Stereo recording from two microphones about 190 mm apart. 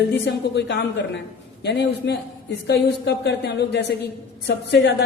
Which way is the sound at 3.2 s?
60° left (ahead or behind).